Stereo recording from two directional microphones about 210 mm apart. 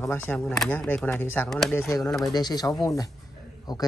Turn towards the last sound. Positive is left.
turn(degrees=20)  # may be behind; listen again after turning